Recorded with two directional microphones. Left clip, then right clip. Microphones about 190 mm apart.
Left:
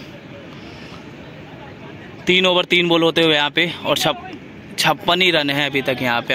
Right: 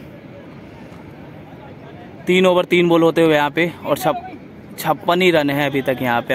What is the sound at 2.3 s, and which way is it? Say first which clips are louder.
Speech: right 1 dB; 5° right (ahead or behind).